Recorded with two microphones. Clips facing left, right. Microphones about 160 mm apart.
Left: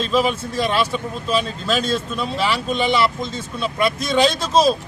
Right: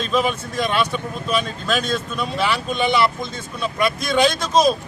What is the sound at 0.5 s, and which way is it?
Speech, 30° left (ahead or behind).